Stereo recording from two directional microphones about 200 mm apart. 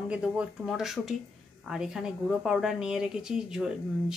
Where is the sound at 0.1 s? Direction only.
5° right (ahead or behind).